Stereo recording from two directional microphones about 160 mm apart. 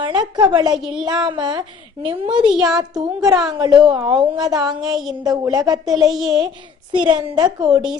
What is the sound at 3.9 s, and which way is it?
A woman's voice, 25° right (ahead or behind).